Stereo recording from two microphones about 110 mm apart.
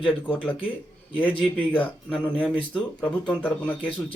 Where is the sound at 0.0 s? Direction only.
10° right (ahead or behind).